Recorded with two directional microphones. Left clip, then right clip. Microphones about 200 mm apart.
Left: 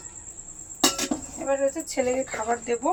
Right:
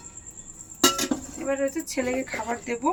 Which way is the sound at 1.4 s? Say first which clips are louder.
Left 3 dB; centre (ahead or behind).